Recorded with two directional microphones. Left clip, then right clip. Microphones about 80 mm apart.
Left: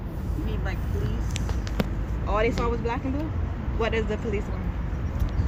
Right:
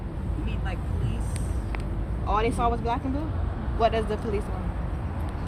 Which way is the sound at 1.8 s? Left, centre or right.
Right.